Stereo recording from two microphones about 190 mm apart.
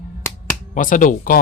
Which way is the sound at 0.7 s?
45° left (ahead or behind).